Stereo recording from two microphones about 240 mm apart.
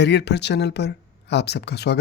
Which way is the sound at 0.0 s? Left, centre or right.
Left.